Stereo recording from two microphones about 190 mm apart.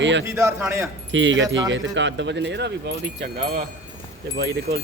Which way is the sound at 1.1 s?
75° right (ahead or behind).